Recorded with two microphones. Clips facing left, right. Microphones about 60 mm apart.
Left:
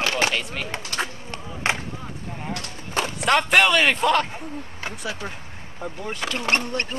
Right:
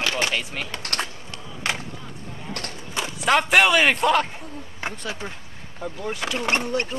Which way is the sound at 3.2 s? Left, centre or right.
Centre.